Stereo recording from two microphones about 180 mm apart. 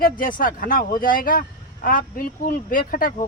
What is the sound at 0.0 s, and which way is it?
Speech, 50° left (ahead or behind).